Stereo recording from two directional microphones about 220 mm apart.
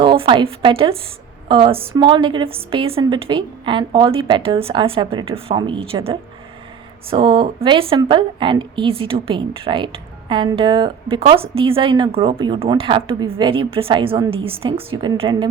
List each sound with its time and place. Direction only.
0.0 s a woman's voice: 20° right (ahead or behind)